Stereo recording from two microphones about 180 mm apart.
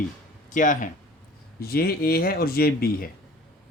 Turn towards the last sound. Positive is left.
turn(degrees=55)  # may be behind; listen again after turning